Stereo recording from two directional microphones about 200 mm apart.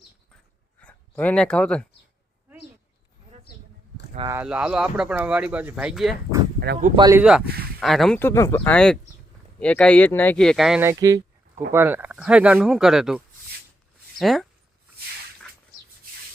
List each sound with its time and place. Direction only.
0.8 s speech: 5° left (ahead or behind)
4.2 s speech: 15° right (ahead or behind)
4.4 s speech: 5° right (ahead or behind)
6.6 s speech: 50° right (ahead or behind)
6.9 s speech: 20° right (ahead or behind)
7.2 s speech: 5° right (ahead or behind)
7.4 s speech: 50° right (ahead or behind)
7.8 s speech: centre (ahead or behind)